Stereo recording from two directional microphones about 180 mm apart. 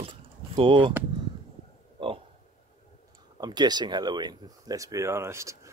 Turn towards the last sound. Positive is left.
turn(degrees=-15)  # may be behind; listen again after turning